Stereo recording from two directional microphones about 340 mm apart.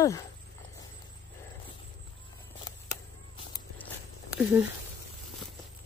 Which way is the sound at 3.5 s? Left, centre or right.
Centre.